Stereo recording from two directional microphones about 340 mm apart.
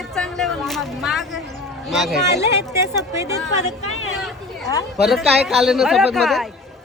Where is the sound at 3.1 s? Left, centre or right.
Centre.